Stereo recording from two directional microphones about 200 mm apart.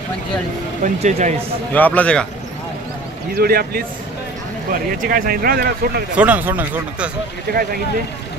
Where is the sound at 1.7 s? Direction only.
5° left (ahead or behind).